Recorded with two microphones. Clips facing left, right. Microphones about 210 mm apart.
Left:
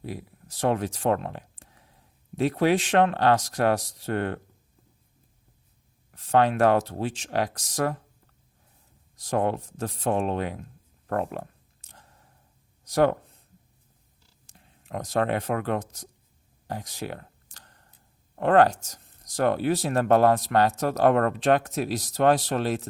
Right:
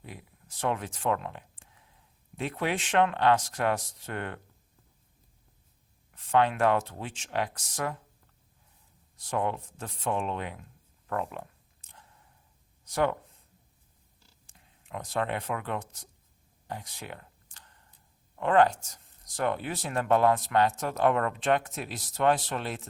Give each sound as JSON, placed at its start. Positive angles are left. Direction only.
{"t": 0.0, "sound": "speech", "side_deg": 40}
{"t": 6.1, "sound": "speech", "side_deg": 40}
{"t": 9.1, "sound": "speech", "side_deg": 40}
{"t": 14.4, "sound": "speech", "side_deg": 40}
{"t": 16.6, "sound": "a sound", "side_deg": 40}
{"t": 18.3, "sound": "speech", "side_deg": 40}